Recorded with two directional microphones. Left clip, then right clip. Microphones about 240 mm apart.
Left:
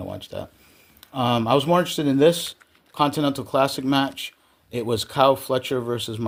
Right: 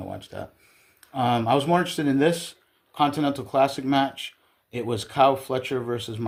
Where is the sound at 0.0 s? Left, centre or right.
Left.